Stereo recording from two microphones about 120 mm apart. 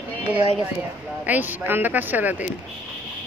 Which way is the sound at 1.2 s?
15° right (ahead or behind).